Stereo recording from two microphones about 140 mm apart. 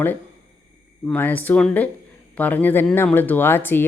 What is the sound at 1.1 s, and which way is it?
Speech, 15° left (ahead or behind).